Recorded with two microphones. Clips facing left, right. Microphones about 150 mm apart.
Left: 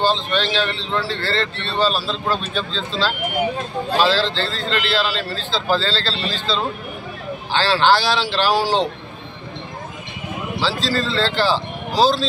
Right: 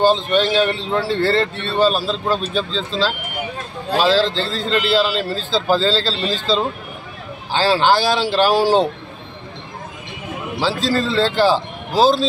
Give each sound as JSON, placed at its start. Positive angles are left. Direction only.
{"t": 0.0, "sound": "a man's voice", "side_deg": -45}
{"t": 3.9, "sound": "a man's voice", "side_deg": -40}
{"t": 4.9, "sound": "a man's voice", "side_deg": -10}
{"t": 5.5, "sound": "a man's voice", "side_deg": -40}
{"t": 7.5, "sound": "a man's voice", "side_deg": -10}
{"t": 8.0, "sound": "a man's voice", "side_deg": -50}
{"t": 10.6, "sound": "a man's voice", "side_deg": -50}
{"t": 11.1, "sound": "a man's voice", "side_deg": -15}
{"t": 11.4, "sound": "speech", "side_deg": -50}